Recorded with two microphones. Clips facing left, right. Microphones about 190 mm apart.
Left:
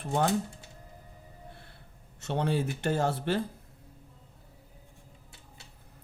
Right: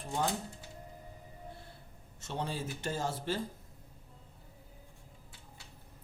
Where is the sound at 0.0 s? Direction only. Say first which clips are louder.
Left 6 dB; 65° left (ahead or behind).